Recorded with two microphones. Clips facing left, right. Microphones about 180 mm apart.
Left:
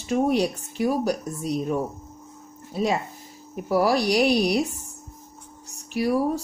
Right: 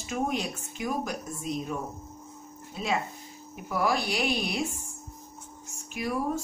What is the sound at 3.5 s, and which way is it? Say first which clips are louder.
Speech: left 7 dB; 35° left (ahead or behind).